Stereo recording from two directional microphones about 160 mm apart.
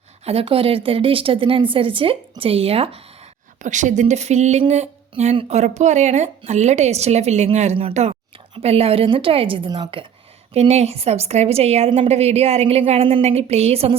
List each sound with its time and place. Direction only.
0.3 s a woman's voice: 35° right (ahead or behind)
3.6 s a woman's voice: 50° right (ahead or behind); by 10.1 s 30° right (ahead or behind)
10.5 s a woman's voice: 40° right (ahead or behind)